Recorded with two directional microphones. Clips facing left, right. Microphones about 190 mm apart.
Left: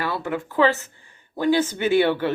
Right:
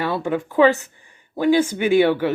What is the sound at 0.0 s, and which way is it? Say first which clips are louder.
Speech: right 4 dB; 20° right (ahead or behind).